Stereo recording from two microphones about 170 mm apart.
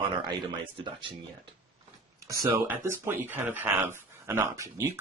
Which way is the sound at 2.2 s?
20° right (ahead or behind).